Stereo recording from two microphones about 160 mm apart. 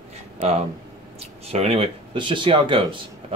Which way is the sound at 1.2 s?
40° right (ahead or behind).